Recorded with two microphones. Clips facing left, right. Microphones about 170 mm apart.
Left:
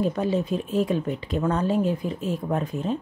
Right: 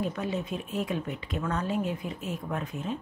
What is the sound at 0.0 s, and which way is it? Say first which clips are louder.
Speech: left 7 dB; 35° left (ahead or behind).